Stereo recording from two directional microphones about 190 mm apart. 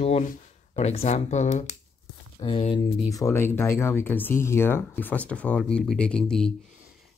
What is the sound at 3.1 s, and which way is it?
Speech, 15° left (ahead or behind).